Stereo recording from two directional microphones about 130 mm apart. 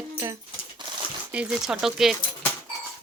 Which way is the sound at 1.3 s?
10° right (ahead or behind).